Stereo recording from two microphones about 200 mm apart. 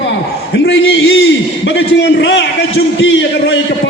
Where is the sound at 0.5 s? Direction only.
65° left (ahead or behind).